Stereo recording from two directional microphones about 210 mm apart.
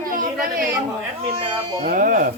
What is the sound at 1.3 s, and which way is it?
Speech, 25° right (ahead or behind).